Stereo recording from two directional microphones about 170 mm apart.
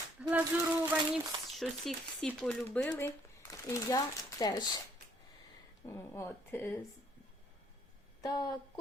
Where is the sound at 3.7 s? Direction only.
20° left (ahead or behind).